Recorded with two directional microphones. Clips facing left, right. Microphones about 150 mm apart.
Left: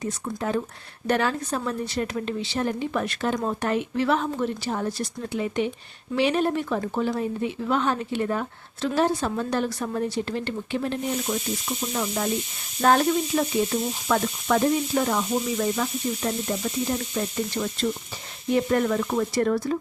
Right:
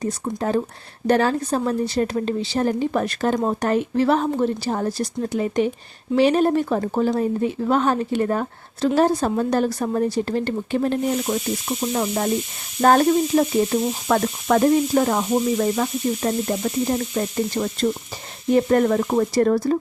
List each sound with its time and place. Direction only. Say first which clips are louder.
0.0 s sizzle: right 4 dB; 40° right (ahead or behind)